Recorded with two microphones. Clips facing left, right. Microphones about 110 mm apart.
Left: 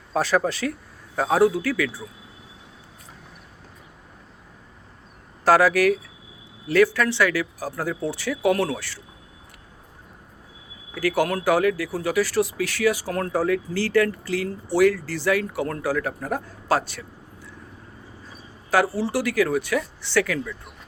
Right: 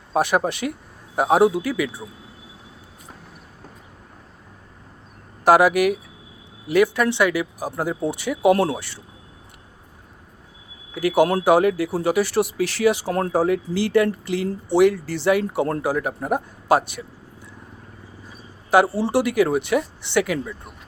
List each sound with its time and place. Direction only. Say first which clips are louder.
0.1 s speech: right 2 dB; 20° right (ahead or behind)
5.5 s speech: right 2 dB; 15° right (ahead or behind)
10.9 s speech: right 4 dB; 20° right (ahead or behind)
18.7 s speech: right 4 dB; 20° right (ahead or behind)